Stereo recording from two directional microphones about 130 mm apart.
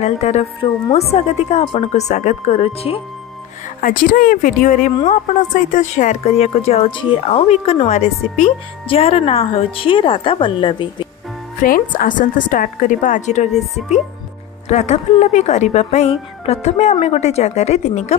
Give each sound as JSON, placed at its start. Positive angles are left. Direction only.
{"t": 0.0, "sound": "speech", "side_deg": 60}
{"t": 3.8, "sound": "a woman's voice", "side_deg": 90}
{"t": 5.0, "sound": "speech", "side_deg": 70}
{"t": 11.6, "sound": "a woman's voice", "side_deg": 90}
{"t": 14.7, "sound": "speech", "side_deg": 60}